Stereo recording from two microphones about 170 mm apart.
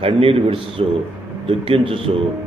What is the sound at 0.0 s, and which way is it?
A man's voice, 35° right (ahead or behind).